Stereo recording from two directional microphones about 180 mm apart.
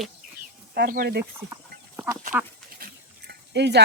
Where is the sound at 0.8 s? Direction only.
55° right (ahead or behind).